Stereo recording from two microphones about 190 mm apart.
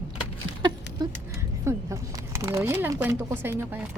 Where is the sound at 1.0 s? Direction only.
20° right (ahead or behind).